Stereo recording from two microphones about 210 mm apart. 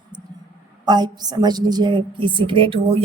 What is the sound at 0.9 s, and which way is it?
Speech, 20° right (ahead or behind).